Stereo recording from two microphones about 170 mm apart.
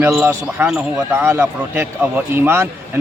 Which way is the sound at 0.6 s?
5° right (ahead or behind).